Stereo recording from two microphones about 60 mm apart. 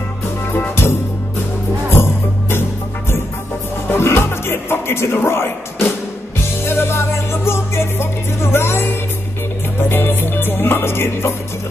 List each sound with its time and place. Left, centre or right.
1.9 s music: left
3.9 s music: left